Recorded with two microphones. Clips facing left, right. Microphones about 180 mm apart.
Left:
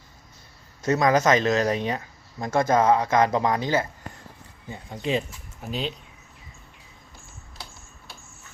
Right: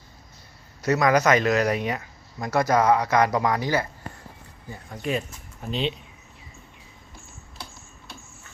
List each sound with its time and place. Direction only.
0.9 s speech: 25° left (ahead or behind)
5.6 s speech: 5° left (ahead or behind)